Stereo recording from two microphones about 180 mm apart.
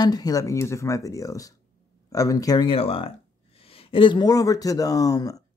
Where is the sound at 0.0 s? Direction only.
20° left (ahead or behind).